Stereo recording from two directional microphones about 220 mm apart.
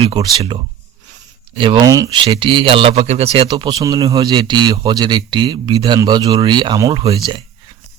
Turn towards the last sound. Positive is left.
turn(degrees=-20)  # may be behind; listen again after turning